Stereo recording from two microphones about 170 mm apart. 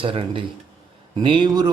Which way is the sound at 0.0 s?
30° right (ahead or behind).